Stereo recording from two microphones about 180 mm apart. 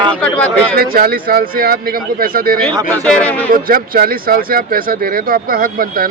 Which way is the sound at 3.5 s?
55° right (ahead or behind).